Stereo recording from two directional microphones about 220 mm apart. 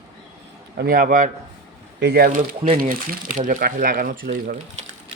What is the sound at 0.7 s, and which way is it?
Speech, 40° right (ahead or behind).